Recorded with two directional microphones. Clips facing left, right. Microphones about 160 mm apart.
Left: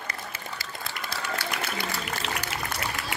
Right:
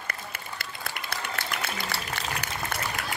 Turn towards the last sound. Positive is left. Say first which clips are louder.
# even
turn(degrees=-50)  # may be behind; listen again after turning